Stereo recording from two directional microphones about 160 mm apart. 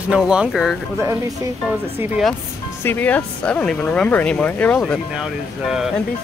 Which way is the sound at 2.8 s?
10° left (ahead or behind).